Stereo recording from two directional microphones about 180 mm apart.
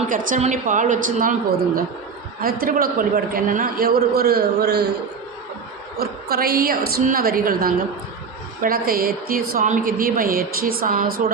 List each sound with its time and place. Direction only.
0.1 s a woman's voice: 40° right (ahead or behind); by 4.8 s 60° right (ahead or behind)
6.0 s a man's voice: 60° right (ahead or behind)